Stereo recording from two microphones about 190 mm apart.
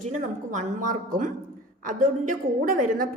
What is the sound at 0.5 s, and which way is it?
A woman's voice, 45° right (ahead or behind).